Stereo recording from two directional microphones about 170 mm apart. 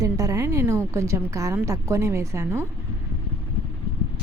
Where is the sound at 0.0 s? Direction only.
20° right (ahead or behind).